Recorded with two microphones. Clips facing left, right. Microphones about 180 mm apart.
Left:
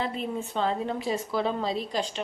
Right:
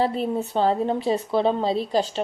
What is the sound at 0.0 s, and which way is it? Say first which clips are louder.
A woman's voice: right 7 dB; 40° right (ahead or behind).